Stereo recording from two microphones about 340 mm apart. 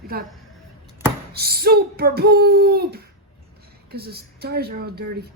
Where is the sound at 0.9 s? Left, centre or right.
Centre.